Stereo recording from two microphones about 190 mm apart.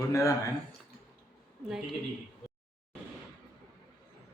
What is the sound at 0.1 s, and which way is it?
Speech, 15° left (ahead or behind).